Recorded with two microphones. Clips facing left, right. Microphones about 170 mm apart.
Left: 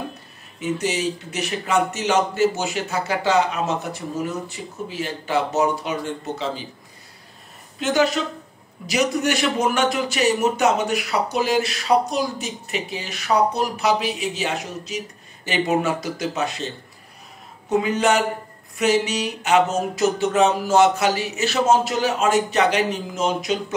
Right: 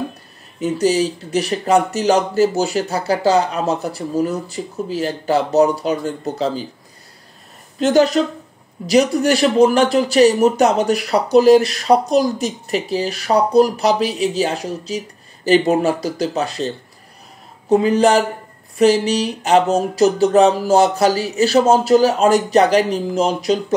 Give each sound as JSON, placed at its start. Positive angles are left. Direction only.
{"t": 0.6, "sound": "a man's voice", "side_deg": -35}
{"t": 7.8, "sound": "a man's voice", "side_deg": -40}